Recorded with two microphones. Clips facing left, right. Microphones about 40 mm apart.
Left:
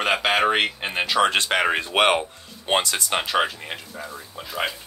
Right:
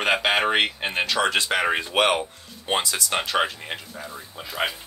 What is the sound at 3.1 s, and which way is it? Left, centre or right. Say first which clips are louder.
Speech: left 1 dB; centre.